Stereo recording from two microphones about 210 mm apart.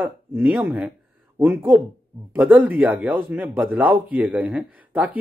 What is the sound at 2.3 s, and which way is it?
Speech, 10° right (ahead or behind).